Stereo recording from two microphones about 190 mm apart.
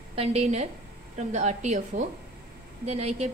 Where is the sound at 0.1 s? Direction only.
30° right (ahead or behind).